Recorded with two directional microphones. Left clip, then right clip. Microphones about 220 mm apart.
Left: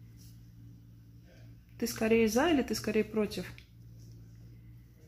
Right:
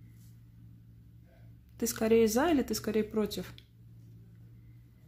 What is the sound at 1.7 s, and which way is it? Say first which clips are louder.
A woman's voice: right 2 dB; 15° right (ahead or behind).